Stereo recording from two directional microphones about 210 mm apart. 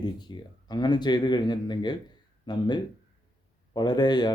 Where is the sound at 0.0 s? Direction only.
20° left (ahead or behind).